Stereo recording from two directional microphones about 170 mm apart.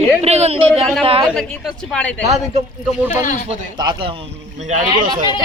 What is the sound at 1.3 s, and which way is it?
Speech, 5° left (ahead or behind).